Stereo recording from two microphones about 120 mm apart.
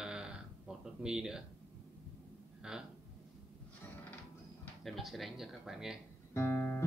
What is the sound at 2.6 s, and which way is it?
Speech, 5° right (ahead or behind).